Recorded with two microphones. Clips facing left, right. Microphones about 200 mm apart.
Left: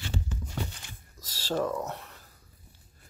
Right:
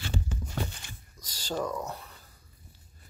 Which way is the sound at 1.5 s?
5° left (ahead or behind).